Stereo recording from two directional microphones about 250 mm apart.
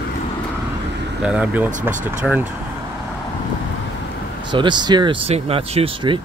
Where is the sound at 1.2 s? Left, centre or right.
Centre.